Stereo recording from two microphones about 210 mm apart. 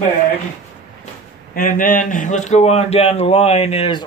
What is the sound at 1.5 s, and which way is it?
A man's voice, 40° left (ahead or behind).